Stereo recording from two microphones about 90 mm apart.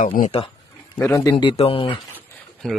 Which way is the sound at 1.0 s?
30° left (ahead or behind).